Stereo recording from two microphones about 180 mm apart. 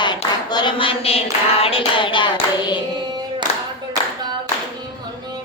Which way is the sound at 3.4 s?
25° right (ahead or behind).